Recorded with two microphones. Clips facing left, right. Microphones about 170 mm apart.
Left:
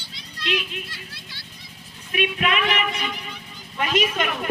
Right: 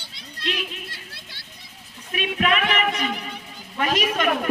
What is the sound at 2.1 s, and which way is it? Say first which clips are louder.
Speech: even; 40° right (ahead or behind).